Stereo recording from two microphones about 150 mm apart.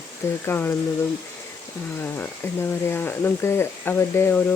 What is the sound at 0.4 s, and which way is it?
Speech, 15° left (ahead or behind).